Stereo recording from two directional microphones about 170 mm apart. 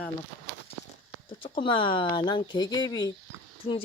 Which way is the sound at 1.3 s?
30° left (ahead or behind).